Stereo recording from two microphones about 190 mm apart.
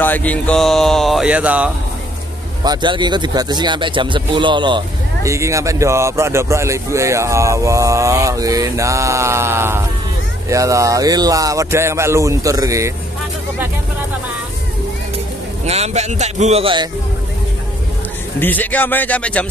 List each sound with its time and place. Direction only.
0.0 s speech: 10° left (ahead or behind); by 1.7 s 5° right (ahead or behind)
2.6 s speech: 20° right (ahead or behind)
15.6 s speech: 35° right (ahead or behind)
18.4 s a man's voice: 10° left (ahead or behind)